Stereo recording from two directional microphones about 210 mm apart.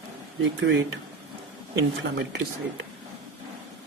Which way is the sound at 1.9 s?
55° right (ahead or behind).